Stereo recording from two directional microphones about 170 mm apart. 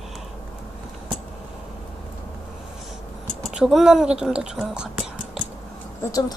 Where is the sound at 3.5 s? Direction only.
5° right (ahead or behind).